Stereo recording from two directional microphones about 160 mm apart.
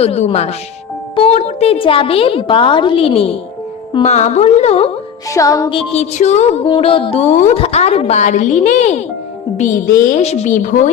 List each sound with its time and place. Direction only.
0.0 s a woman's voice: 40° left (ahead or behind)
5.3 s music: 20° left (ahead or behind)
5.7 s a woman's voice: 40° left (ahead or behind)
6.7 s a woman's voice: 30° left (ahead or behind)
10.2 s a woman's voice: 45° left (ahead or behind)